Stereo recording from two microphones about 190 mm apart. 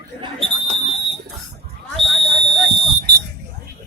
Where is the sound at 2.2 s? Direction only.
30° right (ahead or behind).